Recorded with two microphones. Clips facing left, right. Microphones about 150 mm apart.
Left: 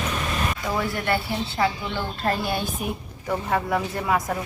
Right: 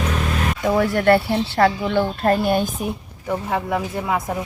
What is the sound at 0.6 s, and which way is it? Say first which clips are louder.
Speech: right 12 dB; 60° right (ahead or behind).